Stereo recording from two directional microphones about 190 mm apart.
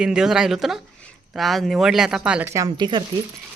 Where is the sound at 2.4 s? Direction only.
15° right (ahead or behind).